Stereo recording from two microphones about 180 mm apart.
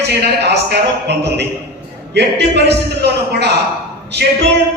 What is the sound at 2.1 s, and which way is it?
A man's voice, 70° right (ahead or behind).